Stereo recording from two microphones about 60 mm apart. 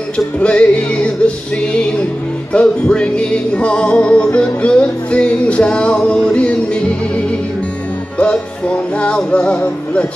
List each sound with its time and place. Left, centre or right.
0.4 s music: centre